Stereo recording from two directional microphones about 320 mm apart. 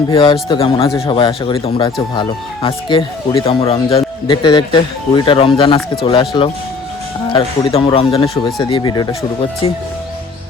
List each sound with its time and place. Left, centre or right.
0.1 s speech: centre